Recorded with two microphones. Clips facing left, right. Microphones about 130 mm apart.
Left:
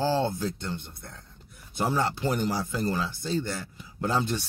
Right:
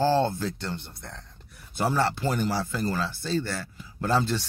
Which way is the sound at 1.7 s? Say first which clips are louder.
Right 2 dB; 15° left (ahead or behind).